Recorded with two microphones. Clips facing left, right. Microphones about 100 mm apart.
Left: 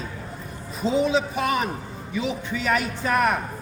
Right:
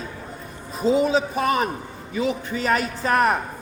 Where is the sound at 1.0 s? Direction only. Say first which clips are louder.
Right 2 dB; 40° right (ahead or behind).